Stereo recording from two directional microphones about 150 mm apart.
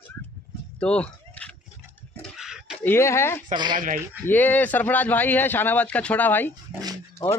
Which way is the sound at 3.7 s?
65° right (ahead or behind).